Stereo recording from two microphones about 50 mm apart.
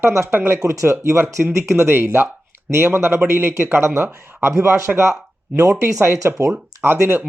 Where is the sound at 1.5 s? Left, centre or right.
Right.